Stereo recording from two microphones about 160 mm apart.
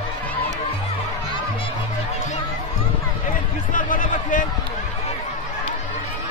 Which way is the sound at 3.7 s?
55° left (ahead or behind).